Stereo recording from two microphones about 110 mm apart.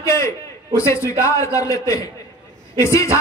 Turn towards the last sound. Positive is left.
turn(degrees=25)  # may be behind; listen again after turning